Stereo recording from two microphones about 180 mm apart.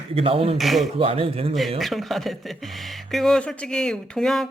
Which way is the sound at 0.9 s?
30° right (ahead or behind).